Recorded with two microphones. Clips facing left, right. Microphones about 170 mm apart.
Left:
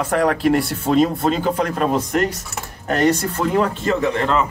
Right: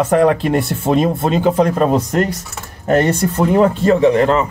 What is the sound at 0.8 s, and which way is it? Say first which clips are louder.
Speech: right 1 dB; 25° right (ahead or behind).